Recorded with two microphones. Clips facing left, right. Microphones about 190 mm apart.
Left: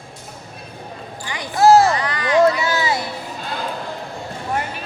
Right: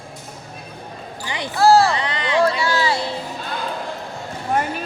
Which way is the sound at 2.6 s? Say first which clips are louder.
Right 1 dB; 20° left (ahead or behind).